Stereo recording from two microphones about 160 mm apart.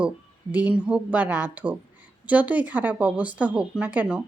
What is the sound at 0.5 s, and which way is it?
Speech, 10° right (ahead or behind).